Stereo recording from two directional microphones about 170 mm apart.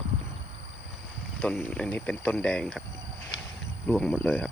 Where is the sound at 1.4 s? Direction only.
5° left (ahead or behind).